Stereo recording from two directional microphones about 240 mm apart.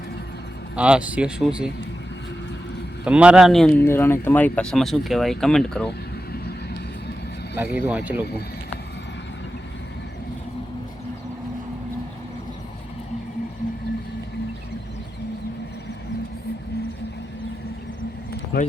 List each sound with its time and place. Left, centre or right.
0.8 s speech: centre
3.0 s speech: centre
7.5 s speech: centre
18.5 s speech: left